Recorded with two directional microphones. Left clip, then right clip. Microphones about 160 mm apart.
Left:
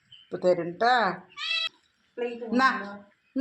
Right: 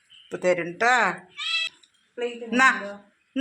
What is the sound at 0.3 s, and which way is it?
Speech, 25° right (ahead or behind).